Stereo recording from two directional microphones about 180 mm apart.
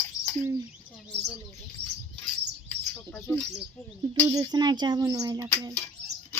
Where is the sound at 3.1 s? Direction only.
10° left (ahead or behind).